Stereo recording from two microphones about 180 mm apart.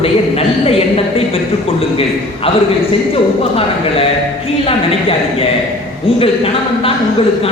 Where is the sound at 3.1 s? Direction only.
30° left (ahead or behind).